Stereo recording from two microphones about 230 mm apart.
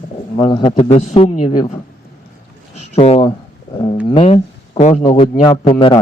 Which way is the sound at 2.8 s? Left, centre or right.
Left.